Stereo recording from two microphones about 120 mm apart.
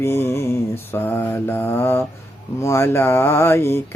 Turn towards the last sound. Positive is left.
turn(degrees=20)  # may be behind; listen again after turning